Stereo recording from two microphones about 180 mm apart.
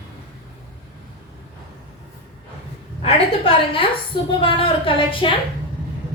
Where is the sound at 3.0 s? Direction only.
30° left (ahead or behind).